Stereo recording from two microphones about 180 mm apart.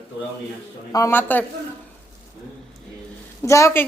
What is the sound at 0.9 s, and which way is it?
Speech, 15° left (ahead or behind).